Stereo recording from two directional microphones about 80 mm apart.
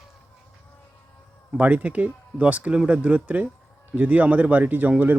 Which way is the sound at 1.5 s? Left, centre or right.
Centre.